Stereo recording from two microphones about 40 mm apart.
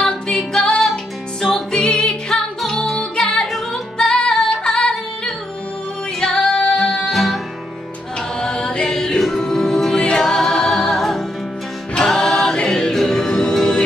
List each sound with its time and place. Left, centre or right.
0.0 s music: centre
4.4 s female singing: centre
4.7 s music: left
6.1 s female singing: centre
7.1 s music: centre
8.4 s chant: left
8.9 s music: centre
9.9 s music: left
10.3 s music: centre